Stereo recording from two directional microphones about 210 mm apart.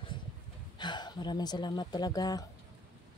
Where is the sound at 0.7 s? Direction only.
20° left (ahead or behind).